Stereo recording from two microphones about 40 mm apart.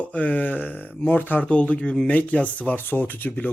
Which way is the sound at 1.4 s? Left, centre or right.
Left.